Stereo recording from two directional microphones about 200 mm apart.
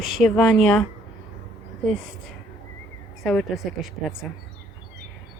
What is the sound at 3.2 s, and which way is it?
Speech, centre (ahead or behind).